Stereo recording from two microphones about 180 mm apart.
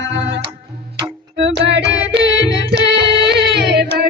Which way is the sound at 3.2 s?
70° right (ahead or behind).